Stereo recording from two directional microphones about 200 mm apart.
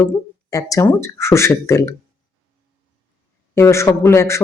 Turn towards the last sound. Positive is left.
turn(degrees=15)  # may be behind; listen again after turning